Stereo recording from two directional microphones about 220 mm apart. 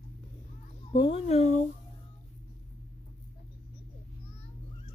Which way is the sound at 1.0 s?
25° left (ahead or behind).